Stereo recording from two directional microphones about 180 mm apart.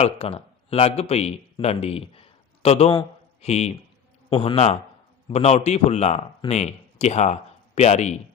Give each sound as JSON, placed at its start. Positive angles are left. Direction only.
{"t": 0.0, "sound": "a man's voice", "side_deg": 35}